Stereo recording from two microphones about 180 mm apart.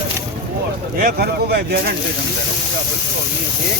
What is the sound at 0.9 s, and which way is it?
Speech, 55° right (ahead or behind).